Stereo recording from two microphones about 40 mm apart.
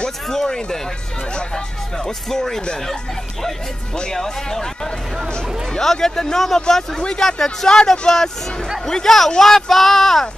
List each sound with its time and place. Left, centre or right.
0.3 s speech: centre
2.0 s speech: centre
4.1 s speech: centre
5.8 s speech: centre